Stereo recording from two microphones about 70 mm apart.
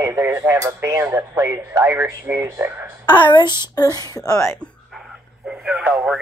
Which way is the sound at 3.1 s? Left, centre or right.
Left.